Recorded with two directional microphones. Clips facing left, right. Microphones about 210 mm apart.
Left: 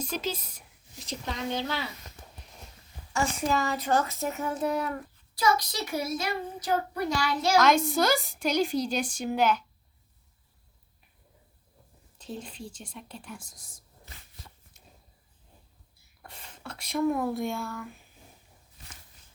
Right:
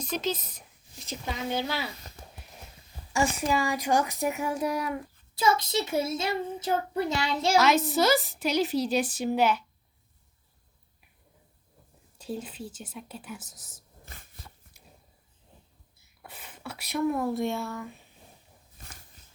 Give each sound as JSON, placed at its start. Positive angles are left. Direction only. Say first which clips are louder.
{"t": 0.0, "sound": "speech", "louder": "right 2 dB", "side_deg": 10}
{"t": 1.0, "sound": "a child's voice", "louder": "even", "side_deg": -5}
{"t": 3.1, "sound": "a child's voice", "louder": "right 1 dB", "side_deg": -10}
{"t": 5.3, "sound": "a child's voice", "louder": "right 1 dB", "side_deg": -25}
{"t": 7.5, "sound": "a woman's voice", "louder": "even", "side_deg": -5}
{"t": 12.1, "sound": "a woman's voice", "louder": "right 4 dB", "side_deg": -10}
{"t": 14.0, "sound": "a sound", "louder": "right 2 dB", "side_deg": -50}
{"t": 16.2, "sound": "speech", "louder": "right 2 dB", "side_deg": -5}
{"t": 18.8, "sound": "a sound", "louder": "right 2 dB", "side_deg": -50}